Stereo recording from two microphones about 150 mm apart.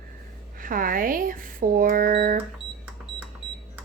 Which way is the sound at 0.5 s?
65° right (ahead or behind).